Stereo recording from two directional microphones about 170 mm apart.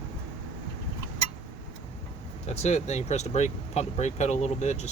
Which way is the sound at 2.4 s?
40° left (ahead or behind).